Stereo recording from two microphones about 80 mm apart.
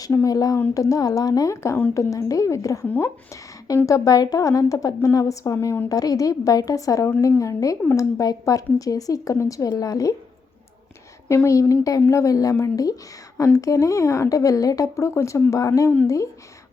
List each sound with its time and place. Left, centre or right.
0.0 s speech: left
2.8 s speech: left
3.8 s speech: left
11.4 s speech: left